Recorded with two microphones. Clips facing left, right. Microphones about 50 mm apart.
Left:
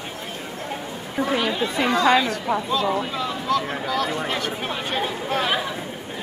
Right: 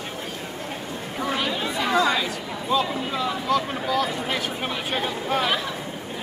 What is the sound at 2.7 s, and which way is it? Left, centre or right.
Speech, centre.